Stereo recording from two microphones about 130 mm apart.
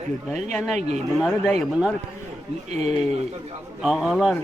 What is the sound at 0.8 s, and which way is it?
Speech, 60° right (ahead or behind).